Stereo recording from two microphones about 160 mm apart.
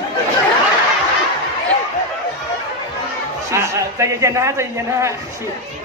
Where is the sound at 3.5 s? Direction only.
15° right (ahead or behind).